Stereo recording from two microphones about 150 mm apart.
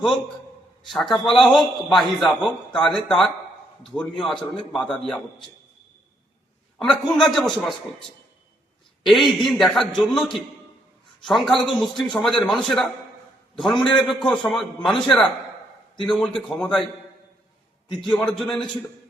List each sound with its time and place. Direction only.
0.9 s a man's voice: centre (ahead or behind)
6.7 s a man's voice: 5° left (ahead or behind)
9.0 s a man's voice: centre (ahead or behind)
11.3 s a man's voice: centre (ahead or behind)
11.9 s a man's voice: 30° left (ahead or behind)
12.2 s a man's voice: 5° left (ahead or behind)
18.0 s a man's voice: 5° left (ahead or behind)